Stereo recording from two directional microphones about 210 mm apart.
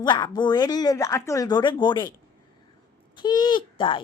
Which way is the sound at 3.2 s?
20° left (ahead or behind).